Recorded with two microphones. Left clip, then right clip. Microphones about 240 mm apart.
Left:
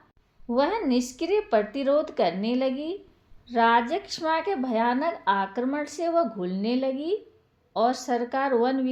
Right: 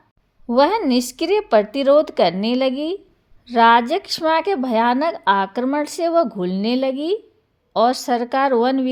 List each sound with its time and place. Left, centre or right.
0.4 s speech: right